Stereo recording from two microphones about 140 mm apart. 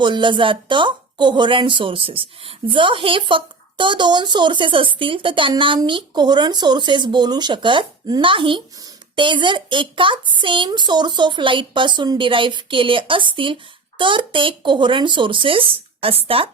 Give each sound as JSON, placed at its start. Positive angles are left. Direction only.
{"t": 0.0, "sound": "a woman's voice", "side_deg": -35}